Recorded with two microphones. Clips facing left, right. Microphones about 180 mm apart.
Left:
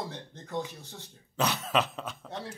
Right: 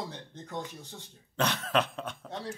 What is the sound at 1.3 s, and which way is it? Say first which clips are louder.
Speech: even; 5° left (ahead or behind).